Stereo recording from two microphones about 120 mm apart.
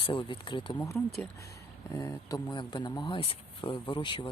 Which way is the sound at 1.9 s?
30° left (ahead or behind).